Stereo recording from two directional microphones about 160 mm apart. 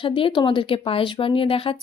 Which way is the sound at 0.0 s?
30° left (ahead or behind).